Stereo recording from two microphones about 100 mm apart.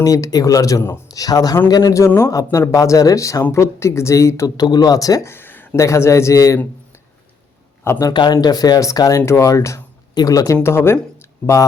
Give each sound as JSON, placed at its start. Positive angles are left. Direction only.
{"t": 0.0, "sound": "speech", "side_deg": 35}
{"t": 4.4, "sound": "speech", "side_deg": 40}
{"t": 5.3, "sound": "a sound", "side_deg": 20}
{"t": 5.8, "sound": "speech", "side_deg": 30}
{"t": 7.9, "sound": "speech", "side_deg": 35}
{"t": 8.1, "sound": "speech", "side_deg": 45}
{"t": 11.2, "sound": "a sound", "side_deg": 30}